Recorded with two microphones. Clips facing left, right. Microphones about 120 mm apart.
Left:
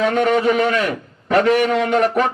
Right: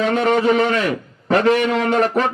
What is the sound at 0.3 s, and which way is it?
Speech, 35° right (ahead or behind).